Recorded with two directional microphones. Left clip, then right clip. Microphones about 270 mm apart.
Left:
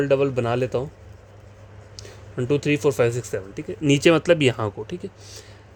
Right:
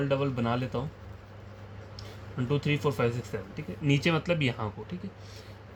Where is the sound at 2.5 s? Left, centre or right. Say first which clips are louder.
Left 9 dB; left.